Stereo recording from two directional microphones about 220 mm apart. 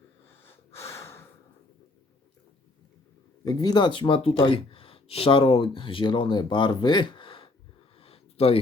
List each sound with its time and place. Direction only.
0.4 s breathing: 10° left (ahead or behind)
3.4 s speech: 15° left (ahead or behind)
7.9 s a sound: 25° left (ahead or behind)